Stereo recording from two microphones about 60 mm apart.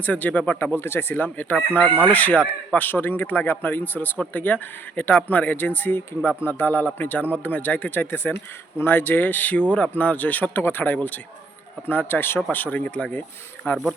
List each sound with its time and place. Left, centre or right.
0.0 s speech: left
0.6 s speech: left